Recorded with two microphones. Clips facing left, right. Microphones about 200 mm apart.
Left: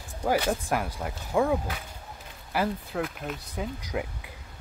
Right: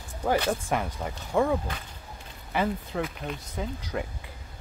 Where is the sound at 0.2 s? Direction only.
10° left (ahead or behind).